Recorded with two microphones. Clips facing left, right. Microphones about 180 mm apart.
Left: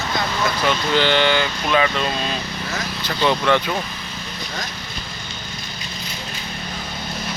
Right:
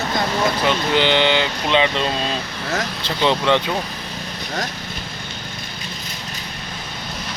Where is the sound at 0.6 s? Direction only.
20° right (ahead or behind).